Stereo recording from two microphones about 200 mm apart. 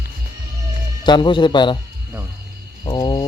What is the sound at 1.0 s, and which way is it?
Speech, 20° left (ahead or behind).